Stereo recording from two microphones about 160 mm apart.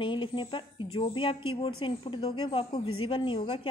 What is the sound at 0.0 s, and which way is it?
Speech, 30° left (ahead or behind).